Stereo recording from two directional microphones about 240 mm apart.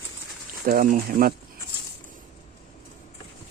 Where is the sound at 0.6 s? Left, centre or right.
Right.